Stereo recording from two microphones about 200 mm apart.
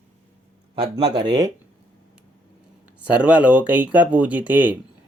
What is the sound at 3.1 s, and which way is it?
Speech, 5° right (ahead or behind).